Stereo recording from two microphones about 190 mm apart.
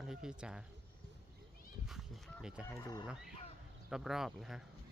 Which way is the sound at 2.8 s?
20° left (ahead or behind).